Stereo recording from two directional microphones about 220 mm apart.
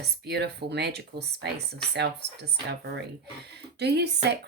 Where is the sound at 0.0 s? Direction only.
50° right (ahead or behind).